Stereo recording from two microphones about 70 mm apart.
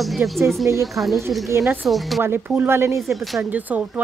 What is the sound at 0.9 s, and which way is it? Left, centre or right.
Speech, centre.